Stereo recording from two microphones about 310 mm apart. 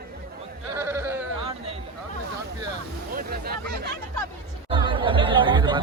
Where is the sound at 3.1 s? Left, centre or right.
Right.